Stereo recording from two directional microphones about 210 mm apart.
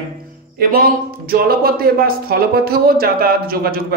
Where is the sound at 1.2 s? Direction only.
45° right (ahead or behind).